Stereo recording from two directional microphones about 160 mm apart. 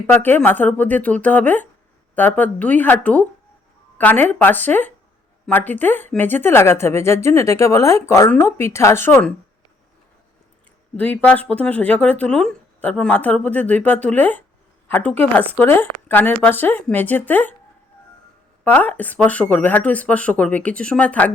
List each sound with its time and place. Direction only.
0.1 s speech: 10° left (ahead or behind)
10.9 s speech: 10° left (ahead or behind)
18.6 s speech: 10° left (ahead or behind)